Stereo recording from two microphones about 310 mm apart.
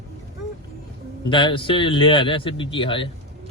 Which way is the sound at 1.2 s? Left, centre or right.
Centre.